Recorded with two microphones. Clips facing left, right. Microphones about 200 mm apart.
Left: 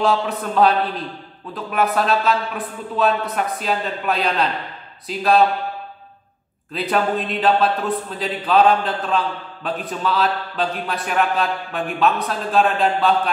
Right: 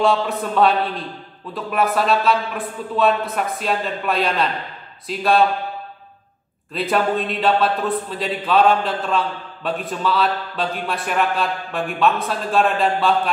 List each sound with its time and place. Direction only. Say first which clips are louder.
0.0 s a man's voice: right 1 dB; centre (ahead or behind)
6.7 s a man's voice: right 1 dB; centre (ahead or behind)